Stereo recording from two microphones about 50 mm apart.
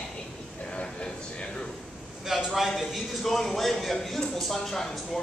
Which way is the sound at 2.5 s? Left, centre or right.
Centre.